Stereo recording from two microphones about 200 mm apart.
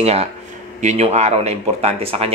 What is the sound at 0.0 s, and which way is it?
Speech, 30° right (ahead or behind).